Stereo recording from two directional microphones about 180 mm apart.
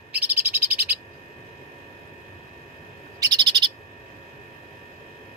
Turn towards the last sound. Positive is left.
turn(degrees=-25)  # may be behind; listen again after turning